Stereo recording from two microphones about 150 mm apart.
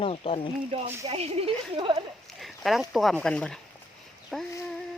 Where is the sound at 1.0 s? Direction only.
40° right (ahead or behind).